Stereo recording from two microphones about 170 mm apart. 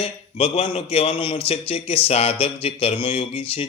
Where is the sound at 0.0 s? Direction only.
35° left (ahead or behind).